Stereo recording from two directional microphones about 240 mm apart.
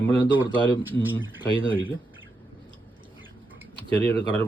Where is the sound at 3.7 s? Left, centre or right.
Right.